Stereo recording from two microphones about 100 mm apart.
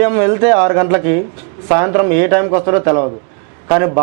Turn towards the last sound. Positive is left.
turn(degrees=-15)  # may be behind; listen again after turning